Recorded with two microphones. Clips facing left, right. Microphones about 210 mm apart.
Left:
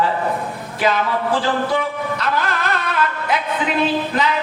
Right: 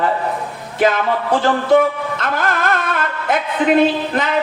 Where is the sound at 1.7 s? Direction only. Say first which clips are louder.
Right 7 dB; 50° right (ahead or behind).